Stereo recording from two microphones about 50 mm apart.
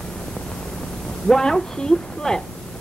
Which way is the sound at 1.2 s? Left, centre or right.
Centre.